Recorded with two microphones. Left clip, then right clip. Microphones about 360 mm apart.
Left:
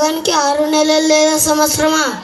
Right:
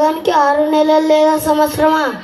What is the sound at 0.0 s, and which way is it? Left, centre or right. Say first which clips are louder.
Child singing: right 2 dB; right.